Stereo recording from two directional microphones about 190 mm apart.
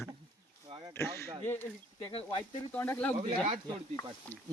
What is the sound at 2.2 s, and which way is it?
Speech, 10° left (ahead or behind).